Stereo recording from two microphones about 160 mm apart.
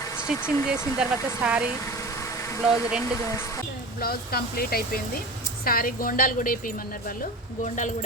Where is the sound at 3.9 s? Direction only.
70° left (ahead or behind).